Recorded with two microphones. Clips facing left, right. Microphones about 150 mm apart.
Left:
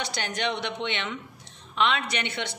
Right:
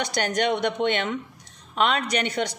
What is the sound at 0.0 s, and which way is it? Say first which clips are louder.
A woman's voice: right 6 dB; 45° right (ahead or behind).